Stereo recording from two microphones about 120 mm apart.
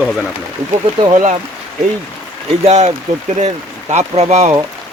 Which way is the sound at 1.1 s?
90° right.